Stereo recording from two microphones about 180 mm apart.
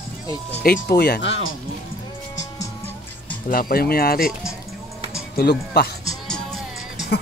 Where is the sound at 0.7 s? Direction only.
60° left (ahead or behind).